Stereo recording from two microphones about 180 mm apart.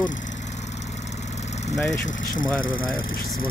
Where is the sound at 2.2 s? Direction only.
50° left (ahead or behind).